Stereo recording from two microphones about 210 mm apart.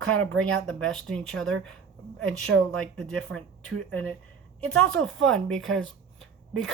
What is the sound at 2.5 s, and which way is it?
Speech, 70° right (ahead or behind).